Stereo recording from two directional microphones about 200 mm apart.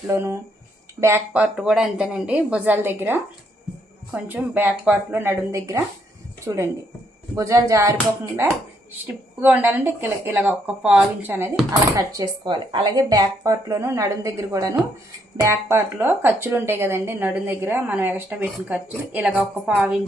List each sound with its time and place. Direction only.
0.1 s speech: 10° right (ahead or behind)
9.4 s speech: 10° right (ahead or behind)